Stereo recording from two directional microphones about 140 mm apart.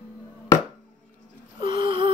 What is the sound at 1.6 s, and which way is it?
Gasp, 40° right (ahead or behind).